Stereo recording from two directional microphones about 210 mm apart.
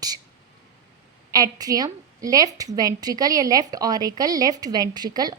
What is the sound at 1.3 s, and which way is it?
A woman's voice, 15° right (ahead or behind).